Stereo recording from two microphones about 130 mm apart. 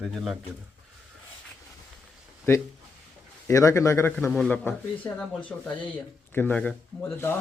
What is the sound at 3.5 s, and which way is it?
A man's voice, 25° left (ahead or behind).